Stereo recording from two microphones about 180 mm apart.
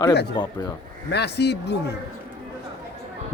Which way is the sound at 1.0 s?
70° left (ahead or behind).